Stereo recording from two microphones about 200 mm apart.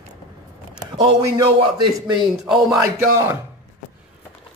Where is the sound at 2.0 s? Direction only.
20° right (ahead or behind).